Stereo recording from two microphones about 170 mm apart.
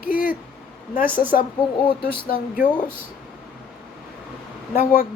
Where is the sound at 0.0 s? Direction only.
55° left (ahead or behind).